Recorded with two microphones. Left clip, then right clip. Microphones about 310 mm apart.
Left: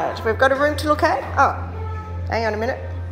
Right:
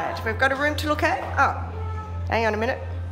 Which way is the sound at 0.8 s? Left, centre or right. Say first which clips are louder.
Left 5 dB; centre.